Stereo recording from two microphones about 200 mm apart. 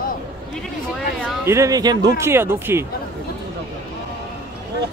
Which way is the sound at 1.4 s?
15° right (ahead or behind).